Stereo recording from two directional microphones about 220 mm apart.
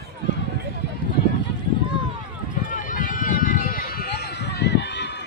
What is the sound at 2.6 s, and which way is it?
Run, 40° left (ahead or behind).